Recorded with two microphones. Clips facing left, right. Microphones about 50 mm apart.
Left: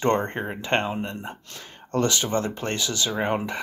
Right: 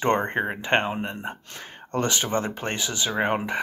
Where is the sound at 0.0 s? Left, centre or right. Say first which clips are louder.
Right 1 dB; right.